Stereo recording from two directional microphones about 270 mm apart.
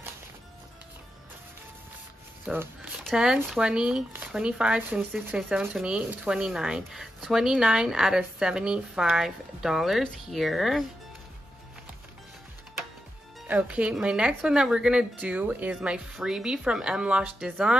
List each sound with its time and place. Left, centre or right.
2.4 s speech: centre
13.5 s speech: centre